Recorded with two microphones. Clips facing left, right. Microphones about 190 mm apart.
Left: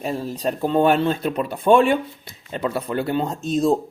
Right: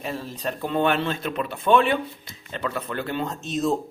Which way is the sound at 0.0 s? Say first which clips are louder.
Left 6 dB; 35° left (ahead or behind).